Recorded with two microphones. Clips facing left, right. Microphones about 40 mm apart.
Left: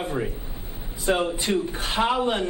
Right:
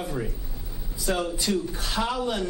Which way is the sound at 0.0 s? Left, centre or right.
Left.